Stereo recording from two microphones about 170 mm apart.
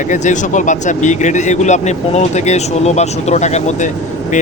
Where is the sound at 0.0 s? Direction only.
45° left (ahead or behind).